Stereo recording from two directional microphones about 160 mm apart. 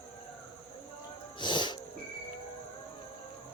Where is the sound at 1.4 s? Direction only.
30° left (ahead or behind).